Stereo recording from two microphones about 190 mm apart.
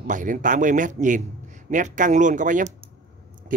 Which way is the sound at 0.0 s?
45° right (ahead or behind).